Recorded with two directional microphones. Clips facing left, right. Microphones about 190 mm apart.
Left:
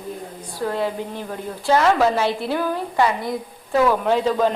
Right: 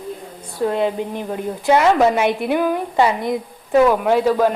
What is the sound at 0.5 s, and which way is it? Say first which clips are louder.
A woman's voice: right 5 dB; 20° right (ahead or behind).